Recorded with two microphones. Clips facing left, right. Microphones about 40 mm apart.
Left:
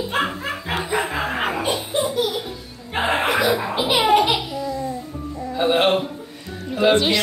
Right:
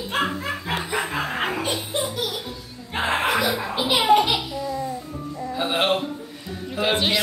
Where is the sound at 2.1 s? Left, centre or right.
Centre.